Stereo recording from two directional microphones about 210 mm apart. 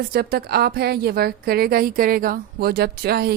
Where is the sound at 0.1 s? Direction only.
45° right (ahead or behind).